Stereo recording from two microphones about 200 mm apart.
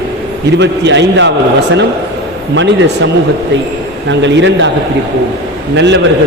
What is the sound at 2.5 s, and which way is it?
Speech, 65° right (ahead or behind).